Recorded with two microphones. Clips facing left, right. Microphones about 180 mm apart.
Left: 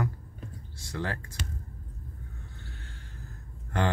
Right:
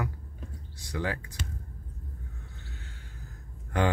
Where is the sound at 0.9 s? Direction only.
15° right (ahead or behind).